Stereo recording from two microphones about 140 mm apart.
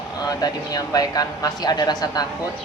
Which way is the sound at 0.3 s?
25° left (ahead or behind).